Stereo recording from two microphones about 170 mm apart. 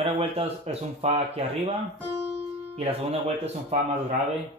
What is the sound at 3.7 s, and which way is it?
Speech, 40° right (ahead or behind).